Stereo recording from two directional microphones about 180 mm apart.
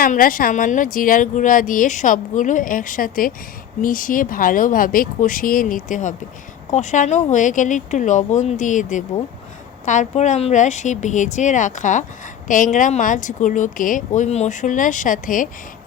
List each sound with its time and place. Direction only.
0.0 s speech: 50° left (ahead or behind)